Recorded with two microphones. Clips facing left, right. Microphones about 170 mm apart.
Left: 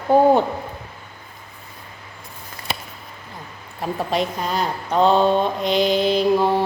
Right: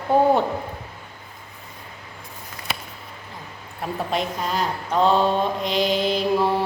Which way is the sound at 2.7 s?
30° left (ahead or behind).